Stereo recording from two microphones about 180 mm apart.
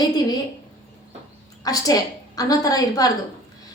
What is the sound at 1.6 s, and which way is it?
A woman's voice, 20° left (ahead or behind).